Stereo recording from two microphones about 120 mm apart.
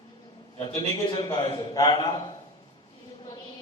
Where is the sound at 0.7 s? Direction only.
50° left (ahead or behind).